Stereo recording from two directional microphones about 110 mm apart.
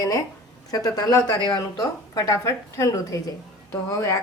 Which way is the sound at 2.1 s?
30° left (ahead or behind).